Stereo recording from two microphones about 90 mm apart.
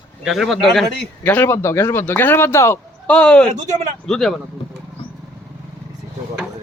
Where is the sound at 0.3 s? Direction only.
Centre (ahead or behind).